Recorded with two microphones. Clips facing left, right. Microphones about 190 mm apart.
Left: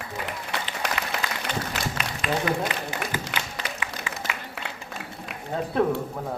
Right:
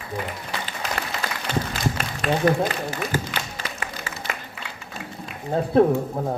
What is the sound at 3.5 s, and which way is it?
Applause, 45° right (ahead or behind).